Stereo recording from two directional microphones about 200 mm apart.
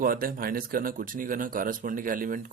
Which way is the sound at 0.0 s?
45° right (ahead or behind).